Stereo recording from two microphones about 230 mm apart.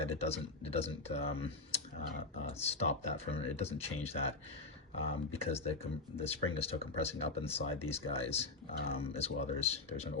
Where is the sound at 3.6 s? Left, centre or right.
Left.